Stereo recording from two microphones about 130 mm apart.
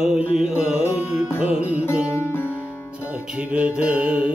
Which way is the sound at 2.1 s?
20° left (ahead or behind).